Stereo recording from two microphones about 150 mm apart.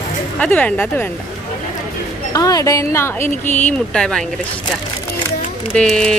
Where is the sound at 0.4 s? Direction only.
10° left (ahead or behind).